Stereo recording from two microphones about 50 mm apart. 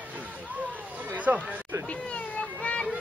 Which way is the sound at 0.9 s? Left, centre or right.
Right.